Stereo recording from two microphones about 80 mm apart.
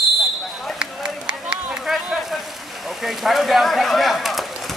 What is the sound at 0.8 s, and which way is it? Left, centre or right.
Run, centre.